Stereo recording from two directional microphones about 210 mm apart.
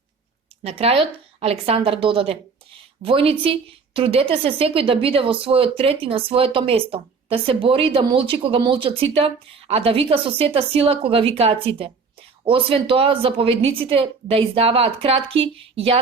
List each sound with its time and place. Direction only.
0.6 s a woman's voice: 30° right (ahead or behind)